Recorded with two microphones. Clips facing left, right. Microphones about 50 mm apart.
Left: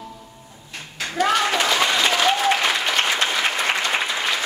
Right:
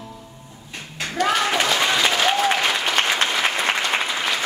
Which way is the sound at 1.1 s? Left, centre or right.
Centre.